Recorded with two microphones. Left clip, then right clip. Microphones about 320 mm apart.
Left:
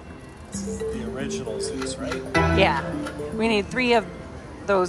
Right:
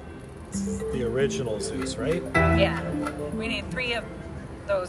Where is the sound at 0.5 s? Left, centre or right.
Right.